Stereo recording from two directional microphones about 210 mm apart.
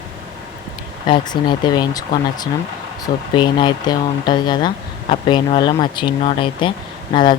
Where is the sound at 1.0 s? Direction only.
20° left (ahead or behind).